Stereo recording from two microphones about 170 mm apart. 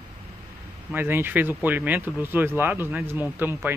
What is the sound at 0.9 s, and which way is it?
Speech, 10° right (ahead or behind).